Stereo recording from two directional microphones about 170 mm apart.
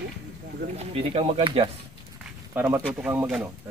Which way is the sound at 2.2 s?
15° right (ahead or behind).